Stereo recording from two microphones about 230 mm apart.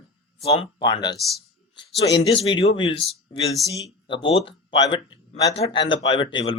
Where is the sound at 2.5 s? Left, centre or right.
Left.